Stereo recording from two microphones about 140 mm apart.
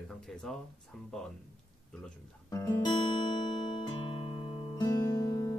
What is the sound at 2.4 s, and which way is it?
Speech, 25° left (ahead or behind).